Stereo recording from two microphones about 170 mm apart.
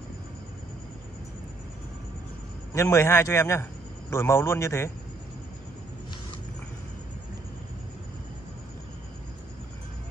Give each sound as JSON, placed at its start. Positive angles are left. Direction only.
{"t": 2.7, "sound": "a man's voice", "side_deg": 15}